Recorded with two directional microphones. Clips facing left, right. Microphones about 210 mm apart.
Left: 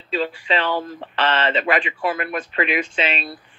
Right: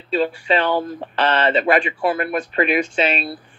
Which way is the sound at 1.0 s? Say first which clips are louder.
Right 2 dB; 40° right (ahead or behind).